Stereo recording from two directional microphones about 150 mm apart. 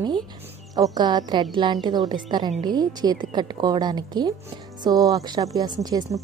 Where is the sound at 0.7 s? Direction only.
25° right (ahead or behind).